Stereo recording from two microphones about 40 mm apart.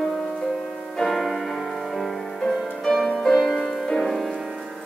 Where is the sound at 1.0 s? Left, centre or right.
Centre.